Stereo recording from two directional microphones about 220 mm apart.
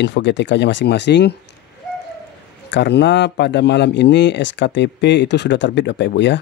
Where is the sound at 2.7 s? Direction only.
50° left (ahead or behind).